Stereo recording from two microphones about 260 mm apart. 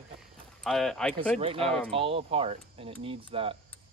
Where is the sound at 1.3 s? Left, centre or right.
Right.